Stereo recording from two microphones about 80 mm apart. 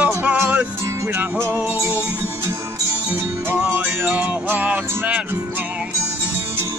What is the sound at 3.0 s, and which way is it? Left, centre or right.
Music, centre.